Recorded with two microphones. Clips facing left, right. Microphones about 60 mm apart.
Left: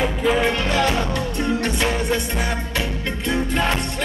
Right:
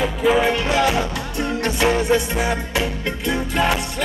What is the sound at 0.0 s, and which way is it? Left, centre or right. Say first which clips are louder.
Music: right 2 dB; centre.